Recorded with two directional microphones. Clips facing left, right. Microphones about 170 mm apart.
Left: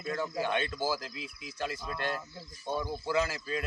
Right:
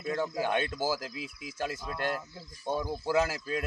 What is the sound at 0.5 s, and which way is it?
Speech, 45° right (ahead or behind).